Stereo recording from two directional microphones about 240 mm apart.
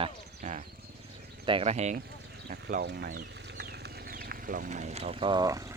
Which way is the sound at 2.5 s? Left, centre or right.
Right.